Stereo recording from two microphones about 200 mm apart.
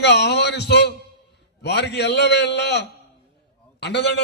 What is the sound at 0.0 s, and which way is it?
A man's voice, 55° left (ahead or behind).